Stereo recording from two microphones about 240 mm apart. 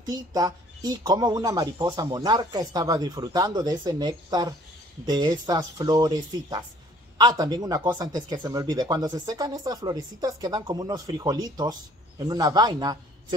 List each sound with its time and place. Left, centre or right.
0.0 s speech: centre